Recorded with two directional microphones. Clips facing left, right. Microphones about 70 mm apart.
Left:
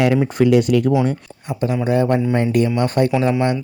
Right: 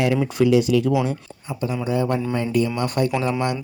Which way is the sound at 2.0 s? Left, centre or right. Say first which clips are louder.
Left 5 dB; left.